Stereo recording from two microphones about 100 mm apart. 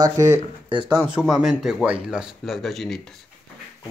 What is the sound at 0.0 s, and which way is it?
Speech, 35° right (ahead or behind).